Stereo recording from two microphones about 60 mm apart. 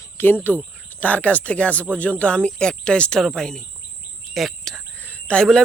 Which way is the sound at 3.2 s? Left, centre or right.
Centre.